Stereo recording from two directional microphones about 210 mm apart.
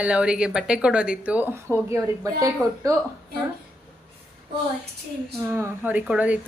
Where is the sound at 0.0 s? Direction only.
5° right (ahead or behind).